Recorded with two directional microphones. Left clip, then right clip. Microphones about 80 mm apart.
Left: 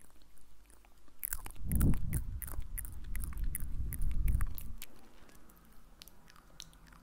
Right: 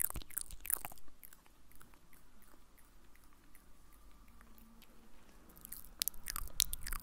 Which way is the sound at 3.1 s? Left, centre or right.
Left.